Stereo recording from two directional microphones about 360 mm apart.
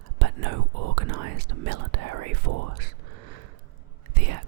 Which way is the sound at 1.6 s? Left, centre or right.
Right.